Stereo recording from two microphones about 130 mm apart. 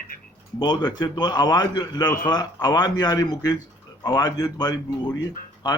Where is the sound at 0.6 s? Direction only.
30° left (ahead or behind).